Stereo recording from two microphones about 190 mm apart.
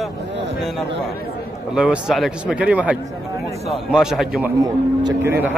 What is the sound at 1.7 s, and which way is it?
A man's voice, 5° right (ahead or behind).